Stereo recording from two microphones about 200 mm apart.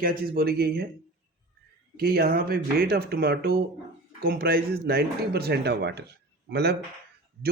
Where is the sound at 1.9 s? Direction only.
50° right (ahead or behind).